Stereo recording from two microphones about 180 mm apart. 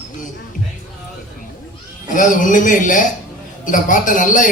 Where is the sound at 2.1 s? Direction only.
45° left (ahead or behind).